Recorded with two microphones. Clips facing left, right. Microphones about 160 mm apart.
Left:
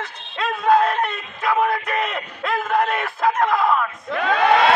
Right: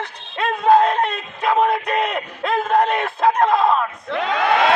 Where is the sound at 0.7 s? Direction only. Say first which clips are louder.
Right 3 dB; 20° right (ahead or behind).